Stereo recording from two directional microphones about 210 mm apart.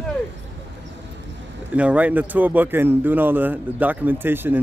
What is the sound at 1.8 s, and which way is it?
Speech, 5° right (ahead or behind).